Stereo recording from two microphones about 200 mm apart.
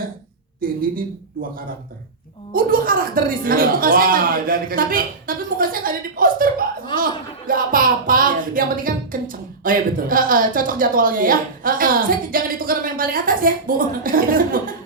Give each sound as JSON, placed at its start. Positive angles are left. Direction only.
{"t": 0.6, "sound": "music", "side_deg": -45}